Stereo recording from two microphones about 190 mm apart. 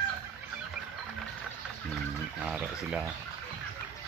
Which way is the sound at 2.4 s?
5° right (ahead or behind).